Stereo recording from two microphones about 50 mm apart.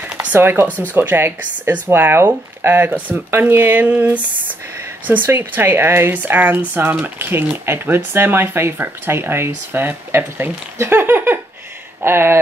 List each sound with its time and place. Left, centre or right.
0.4 s speech: right
0.7 s speech: left
0.9 s speech: right
3.8 s speech: right
7.2 s speech: right